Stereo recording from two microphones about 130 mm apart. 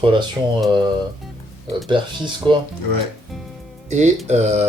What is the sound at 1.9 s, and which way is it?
Speech, 35° right (ahead or behind).